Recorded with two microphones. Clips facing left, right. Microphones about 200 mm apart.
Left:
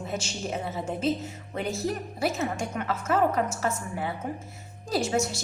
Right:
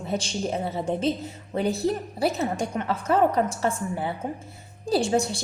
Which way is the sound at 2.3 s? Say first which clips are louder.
Right 3 dB; 35° right (ahead or behind).